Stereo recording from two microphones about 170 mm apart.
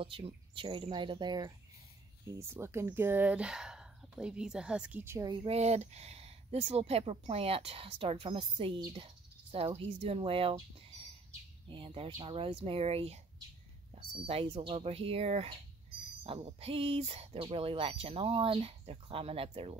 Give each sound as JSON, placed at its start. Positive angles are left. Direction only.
{"t": 0.0, "sound": "speech", "side_deg": -30}
{"t": 11.7, "sound": "speech", "side_deg": -30}